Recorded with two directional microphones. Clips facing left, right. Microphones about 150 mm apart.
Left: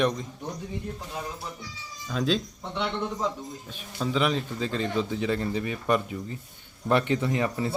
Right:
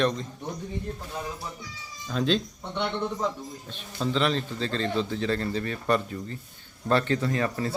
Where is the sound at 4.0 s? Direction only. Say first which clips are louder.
Even; 5° left (ahead or behind).